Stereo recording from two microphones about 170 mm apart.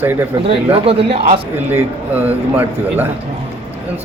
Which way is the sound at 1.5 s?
10° right (ahead or behind).